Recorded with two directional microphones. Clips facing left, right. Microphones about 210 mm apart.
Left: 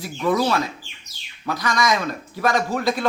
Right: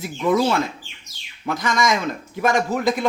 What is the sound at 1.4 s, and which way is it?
A man's voice, 20° right (ahead or behind).